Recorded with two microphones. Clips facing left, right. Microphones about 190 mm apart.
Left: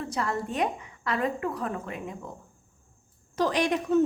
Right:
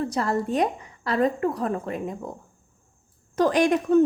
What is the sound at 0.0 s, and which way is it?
A woman's voice, 40° right (ahead or behind).